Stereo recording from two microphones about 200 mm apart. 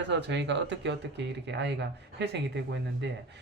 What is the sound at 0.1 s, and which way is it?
Speech, 60° right (ahead or behind).